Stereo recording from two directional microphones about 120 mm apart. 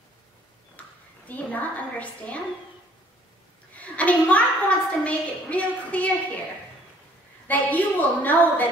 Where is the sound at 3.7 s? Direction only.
10° left (ahead or behind).